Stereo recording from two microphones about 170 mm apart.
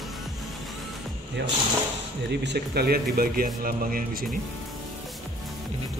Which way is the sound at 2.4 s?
75° right (ahead or behind).